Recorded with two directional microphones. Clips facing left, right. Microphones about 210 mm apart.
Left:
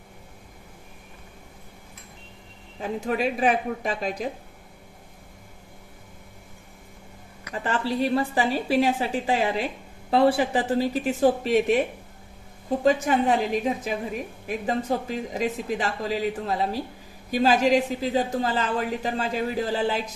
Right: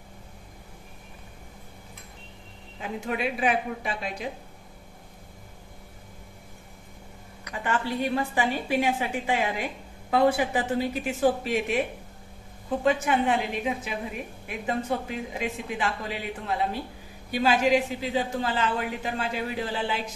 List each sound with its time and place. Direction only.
2.8 s a woman's voice: 40° left (ahead or behind)
7.6 s a woman's voice: 35° left (ahead or behind)
12.8 s a woman's voice: 40° left (ahead or behind)